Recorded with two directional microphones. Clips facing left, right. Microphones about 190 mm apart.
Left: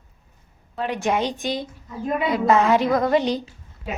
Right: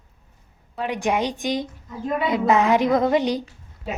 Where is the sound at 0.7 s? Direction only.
15° right (ahead or behind).